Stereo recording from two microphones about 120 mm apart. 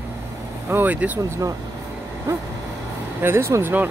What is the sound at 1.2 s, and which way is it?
Speech, 25° right (ahead or behind).